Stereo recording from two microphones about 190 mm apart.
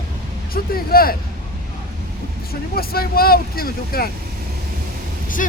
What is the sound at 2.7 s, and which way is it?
Speech, 55° left (ahead or behind).